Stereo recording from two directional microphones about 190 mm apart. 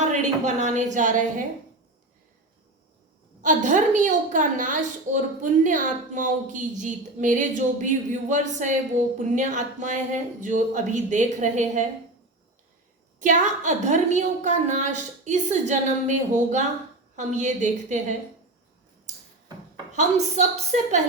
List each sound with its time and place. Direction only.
0.0 s a woman's voice: 40° right (ahead or behind)
3.4 s a woman's voice: 40° right (ahead or behind)
13.1 s a woman's voice: 40° right (ahead or behind)
19.9 s a woman's voice: 40° right (ahead or behind)